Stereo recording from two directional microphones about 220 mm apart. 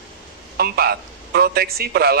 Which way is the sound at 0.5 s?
45° right (ahead or behind).